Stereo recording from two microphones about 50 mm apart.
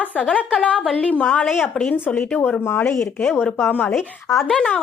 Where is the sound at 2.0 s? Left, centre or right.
Left.